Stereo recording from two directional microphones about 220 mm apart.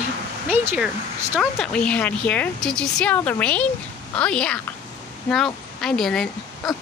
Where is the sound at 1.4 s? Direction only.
5° left (ahead or behind).